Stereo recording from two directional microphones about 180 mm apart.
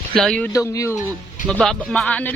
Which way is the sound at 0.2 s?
5° left (ahead or behind).